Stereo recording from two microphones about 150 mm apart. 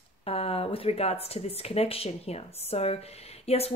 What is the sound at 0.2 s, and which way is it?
Speech, 40° left (ahead or behind).